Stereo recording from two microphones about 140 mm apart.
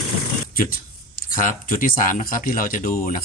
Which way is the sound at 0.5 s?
90° left.